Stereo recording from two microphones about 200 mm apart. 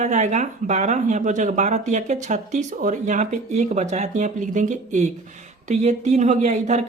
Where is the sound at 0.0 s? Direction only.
35° right (ahead or behind).